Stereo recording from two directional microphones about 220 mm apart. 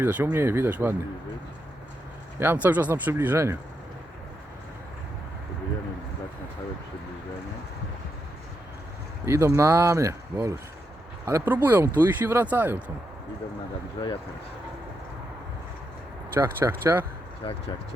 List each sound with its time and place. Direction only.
0.0 s speech: 10° right (ahead or behind)
2.4 s speech: 10° right (ahead or behind)
9.2 s speech: 10° right (ahead or behind)
14.0 s speech: 20° left (ahead or behind)
16.3 s speech: 10° right (ahead or behind)
17.4 s speech: 25° left (ahead or behind)